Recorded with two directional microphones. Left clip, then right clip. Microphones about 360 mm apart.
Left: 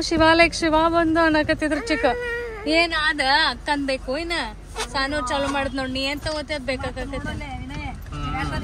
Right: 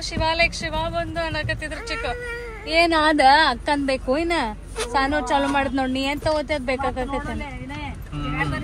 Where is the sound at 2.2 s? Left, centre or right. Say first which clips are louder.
Left 4 dB; centre.